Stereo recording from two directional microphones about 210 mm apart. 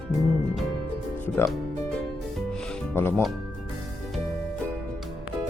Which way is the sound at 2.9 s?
10° left (ahead or behind).